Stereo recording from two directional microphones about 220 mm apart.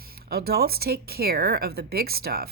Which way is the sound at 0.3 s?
45° right (ahead or behind).